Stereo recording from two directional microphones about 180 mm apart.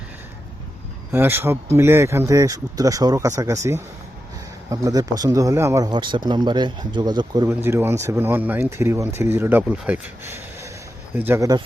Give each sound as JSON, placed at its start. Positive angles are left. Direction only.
{"t": 1.1, "sound": "speech", "side_deg": -10}
{"t": 7.4, "sound": "speech", "side_deg": -10}